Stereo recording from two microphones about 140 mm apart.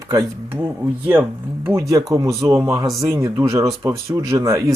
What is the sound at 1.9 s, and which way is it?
Speech, 25° right (ahead or behind).